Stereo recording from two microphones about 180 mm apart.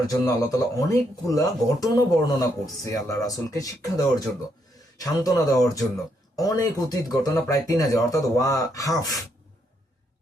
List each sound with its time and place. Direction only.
0.1 s speech: 20° left (ahead or behind)